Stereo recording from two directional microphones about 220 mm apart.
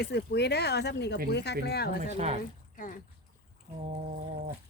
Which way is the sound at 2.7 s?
35° left (ahead or behind).